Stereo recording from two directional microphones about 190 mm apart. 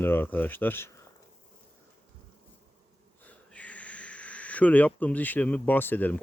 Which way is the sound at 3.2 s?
5° left (ahead or behind).